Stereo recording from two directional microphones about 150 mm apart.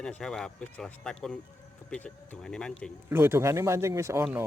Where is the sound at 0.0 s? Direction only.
5° left (ahead or behind).